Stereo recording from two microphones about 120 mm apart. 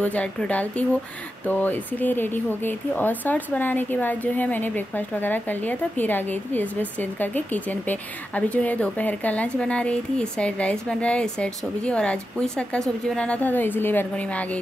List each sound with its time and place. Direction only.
0.0 s a woman's voice: 10° left (ahead or behind)